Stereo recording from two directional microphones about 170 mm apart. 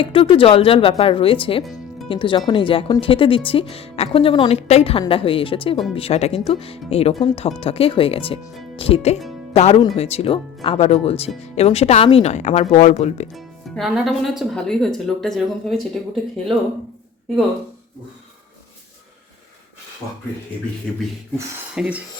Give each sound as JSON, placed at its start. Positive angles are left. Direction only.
{"t": 0.0, "sound": "speech", "side_deg": 30}
{"t": 1.6, "sound": "music", "side_deg": 0}
{"t": 2.0, "sound": "speech", "side_deg": 30}
{"t": 13.3, "sound": "speech", "side_deg": 0}
{"t": 20.9, "sound": "speech", "side_deg": 5}
{"t": 21.8, "sound": "speech", "side_deg": -5}